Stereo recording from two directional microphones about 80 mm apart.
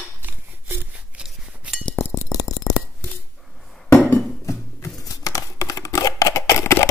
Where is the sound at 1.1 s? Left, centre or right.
Centre.